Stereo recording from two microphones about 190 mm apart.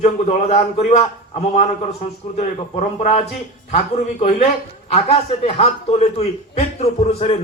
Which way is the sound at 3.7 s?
35° left (ahead or behind).